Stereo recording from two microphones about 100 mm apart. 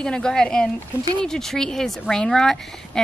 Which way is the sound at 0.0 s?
10° left (ahead or behind).